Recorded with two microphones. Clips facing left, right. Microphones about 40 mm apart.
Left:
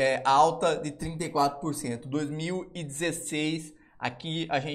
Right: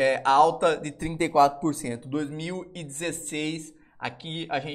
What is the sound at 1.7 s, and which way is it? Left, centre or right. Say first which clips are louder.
Speech: right 1 dB; right.